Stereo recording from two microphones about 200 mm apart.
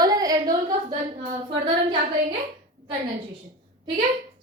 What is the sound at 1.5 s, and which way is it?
Speech, 25° right (ahead or behind).